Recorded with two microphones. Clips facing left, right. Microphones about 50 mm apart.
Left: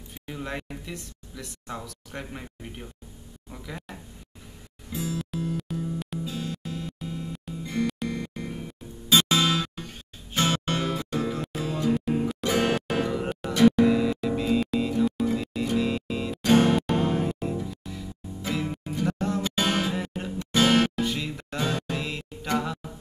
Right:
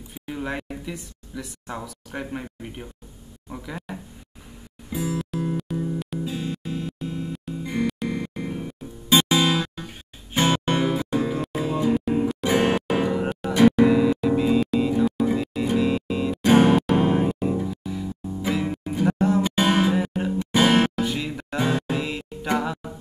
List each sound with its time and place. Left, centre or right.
0.3 s speech: centre
4.9 s music: right
5.7 s music: centre
6.1 s music: right
16.4 s music: centre
21.0 s music: centre